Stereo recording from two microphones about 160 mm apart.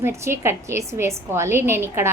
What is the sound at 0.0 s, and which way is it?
A woman's voice, 15° right (ahead or behind).